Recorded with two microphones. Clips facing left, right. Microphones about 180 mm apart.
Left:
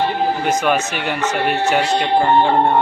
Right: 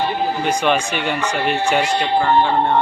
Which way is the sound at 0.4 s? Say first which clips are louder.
Left 1 dB; 5° left (ahead or behind).